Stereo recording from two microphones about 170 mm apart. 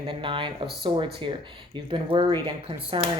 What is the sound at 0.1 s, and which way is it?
Speech, 30° right (ahead or behind).